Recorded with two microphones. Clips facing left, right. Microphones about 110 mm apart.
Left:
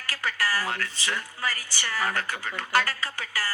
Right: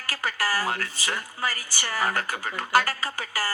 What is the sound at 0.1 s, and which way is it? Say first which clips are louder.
Speech: right 1 dB; 35° right (ahead or behind).